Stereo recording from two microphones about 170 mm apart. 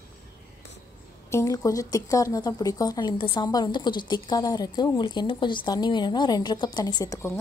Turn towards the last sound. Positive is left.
turn(degrees=15)  # may be behind; listen again after turning